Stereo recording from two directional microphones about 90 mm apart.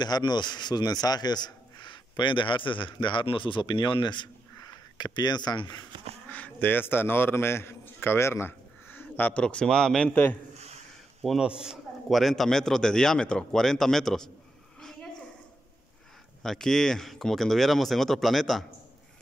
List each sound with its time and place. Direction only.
0.0 s a man's voice: 50° left (ahead or behind)
6.3 s a man's voice: 20° left (ahead or behind)
10.0 s a man's voice: 20° left (ahead or behind)
11.2 s a man's voice: 10° right (ahead or behind)
14.8 s a sound: 5° left (ahead or behind)
16.4 s a man's voice: 5° left (ahead or behind)